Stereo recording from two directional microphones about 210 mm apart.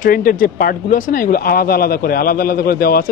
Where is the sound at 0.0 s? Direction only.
40° left (ahead or behind).